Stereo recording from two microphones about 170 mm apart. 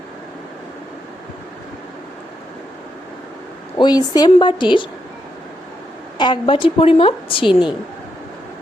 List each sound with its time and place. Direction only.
3.8 s a woman's voice: 25° left (ahead or behind)
6.1 s a woman's voice: 25° left (ahead or behind)